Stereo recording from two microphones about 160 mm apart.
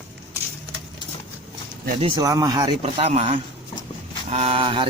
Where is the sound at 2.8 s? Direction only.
40° right (ahead or behind).